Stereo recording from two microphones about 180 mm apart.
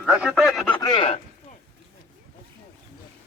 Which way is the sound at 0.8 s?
25° left (ahead or behind).